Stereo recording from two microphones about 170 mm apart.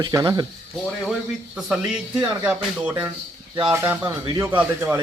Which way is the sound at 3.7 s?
15° right (ahead or behind).